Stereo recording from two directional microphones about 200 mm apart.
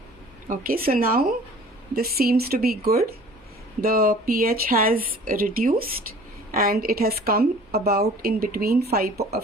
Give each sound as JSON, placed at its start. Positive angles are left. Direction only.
{"t": 0.4, "sound": "a woman's voice", "side_deg": -45}